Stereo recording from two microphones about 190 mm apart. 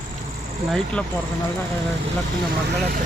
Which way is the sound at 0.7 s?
5° left (ahead or behind).